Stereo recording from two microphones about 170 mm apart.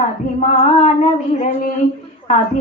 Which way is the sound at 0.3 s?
45° left (ahead or behind).